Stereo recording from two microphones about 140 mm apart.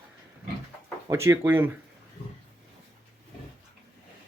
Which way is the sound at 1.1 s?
20° right (ahead or behind).